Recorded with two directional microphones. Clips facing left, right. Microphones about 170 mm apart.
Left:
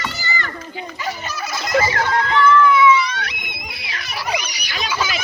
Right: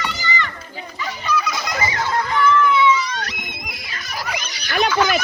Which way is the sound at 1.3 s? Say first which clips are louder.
Right 7 dB; 45° left (ahead or behind).